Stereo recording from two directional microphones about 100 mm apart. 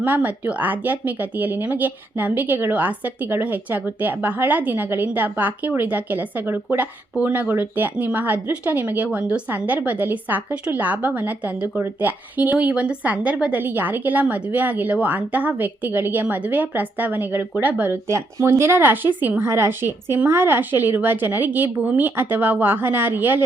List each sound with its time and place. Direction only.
0.0 s a woman's voice: 15° right (ahead or behind)